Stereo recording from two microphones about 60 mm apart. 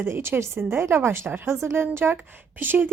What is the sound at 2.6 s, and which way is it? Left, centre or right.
Speech, right.